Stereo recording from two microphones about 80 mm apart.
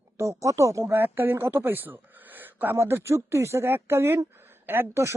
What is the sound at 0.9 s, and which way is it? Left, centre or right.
Speech, right.